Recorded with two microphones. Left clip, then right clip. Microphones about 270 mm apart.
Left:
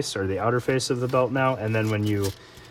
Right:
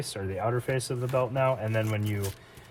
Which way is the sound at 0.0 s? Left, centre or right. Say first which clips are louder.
Left 6 dB; left.